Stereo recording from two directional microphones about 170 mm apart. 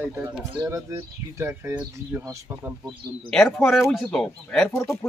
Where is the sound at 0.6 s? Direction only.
15° right (ahead or behind).